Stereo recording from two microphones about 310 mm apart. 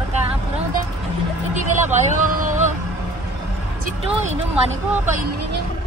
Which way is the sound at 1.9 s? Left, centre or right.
Right.